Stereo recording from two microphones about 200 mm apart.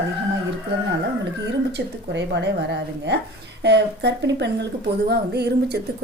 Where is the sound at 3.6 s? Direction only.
55° right (ahead or behind).